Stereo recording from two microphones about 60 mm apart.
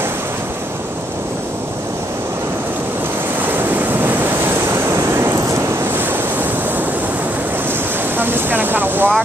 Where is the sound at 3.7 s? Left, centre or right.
Right.